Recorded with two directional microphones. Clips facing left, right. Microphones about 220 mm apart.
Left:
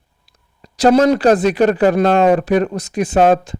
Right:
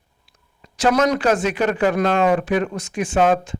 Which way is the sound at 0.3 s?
35° left (ahead or behind).